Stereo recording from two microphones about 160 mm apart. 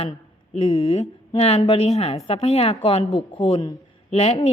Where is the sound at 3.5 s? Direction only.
20° left (ahead or behind).